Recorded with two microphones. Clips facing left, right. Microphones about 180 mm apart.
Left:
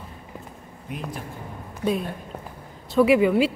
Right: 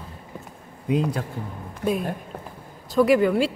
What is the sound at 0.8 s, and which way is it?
Speech, 90° right.